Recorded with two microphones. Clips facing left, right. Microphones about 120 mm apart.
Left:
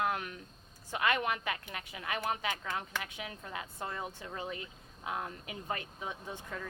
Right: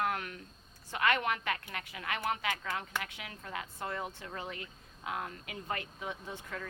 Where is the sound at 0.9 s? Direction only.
15° left (ahead or behind).